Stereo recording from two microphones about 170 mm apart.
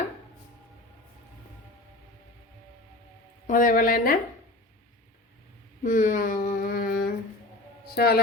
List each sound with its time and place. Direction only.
3.4 s a woman's voice: 55° left (ahead or behind)
5.8 s a sound: 50° left (ahead or behind)
7.9 s a woman's voice: 65° left (ahead or behind)